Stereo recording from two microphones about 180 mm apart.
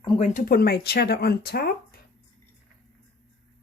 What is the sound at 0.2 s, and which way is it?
Speech, 50° left (ahead or behind).